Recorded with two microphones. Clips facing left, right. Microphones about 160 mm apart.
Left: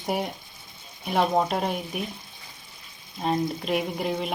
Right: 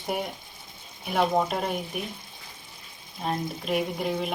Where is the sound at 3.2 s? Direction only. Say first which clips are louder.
Left 4 dB; centre (ahead or behind).